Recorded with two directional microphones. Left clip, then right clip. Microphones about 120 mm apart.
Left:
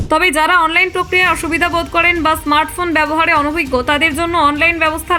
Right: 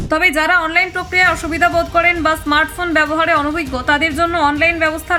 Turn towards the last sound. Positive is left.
turn(degrees=35)  # may be behind; listen again after turning